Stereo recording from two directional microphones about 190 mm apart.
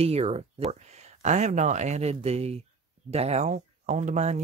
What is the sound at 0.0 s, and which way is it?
Speech, 30° right (ahead or behind).